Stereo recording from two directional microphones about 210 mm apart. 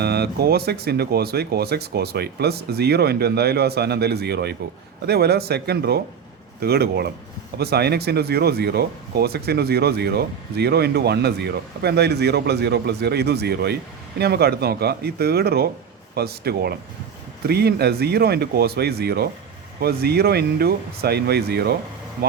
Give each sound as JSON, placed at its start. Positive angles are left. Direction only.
{"t": 0.0, "sound": "speech", "side_deg": -50}